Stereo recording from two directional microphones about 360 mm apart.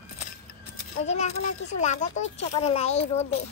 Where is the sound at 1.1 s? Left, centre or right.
Centre.